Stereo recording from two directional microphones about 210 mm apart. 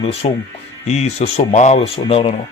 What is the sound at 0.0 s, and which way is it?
Speech, 30° left (ahead or behind).